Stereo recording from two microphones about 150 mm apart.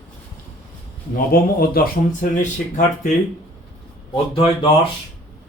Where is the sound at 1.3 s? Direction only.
80° left.